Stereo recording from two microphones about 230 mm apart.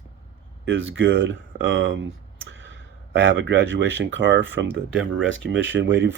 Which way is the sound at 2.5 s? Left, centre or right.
Right.